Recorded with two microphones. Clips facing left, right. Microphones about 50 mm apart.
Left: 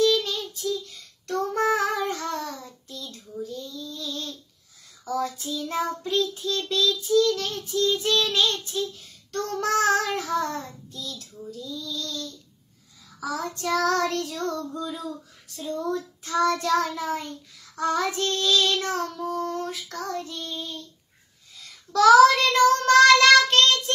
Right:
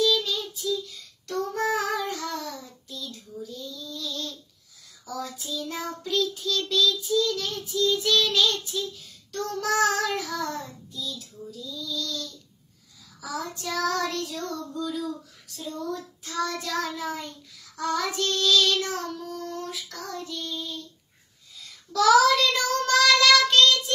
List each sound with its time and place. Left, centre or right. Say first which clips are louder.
0.0 s child singing: left 2 dB; left
10.9 s child singing: right 1 dB; left
14.7 s child singing: right 2 dB; left
15.7 s child singing: left 5 dB; left
21.9 s child singing: left 4 dB; left